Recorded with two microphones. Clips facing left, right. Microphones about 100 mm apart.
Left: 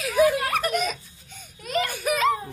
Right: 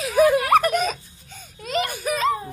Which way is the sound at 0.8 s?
35° right (ahead or behind).